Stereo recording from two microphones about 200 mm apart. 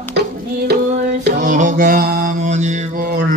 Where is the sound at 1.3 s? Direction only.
40° right (ahead or behind).